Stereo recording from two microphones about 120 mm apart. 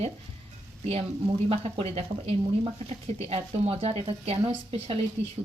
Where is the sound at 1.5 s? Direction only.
55° right (ahead or behind).